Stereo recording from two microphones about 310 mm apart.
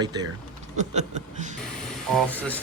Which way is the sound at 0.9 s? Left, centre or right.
Right.